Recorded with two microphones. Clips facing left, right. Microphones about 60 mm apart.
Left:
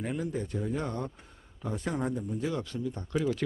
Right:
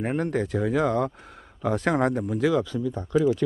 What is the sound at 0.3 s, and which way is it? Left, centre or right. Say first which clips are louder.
Speech: right 8 dB; right.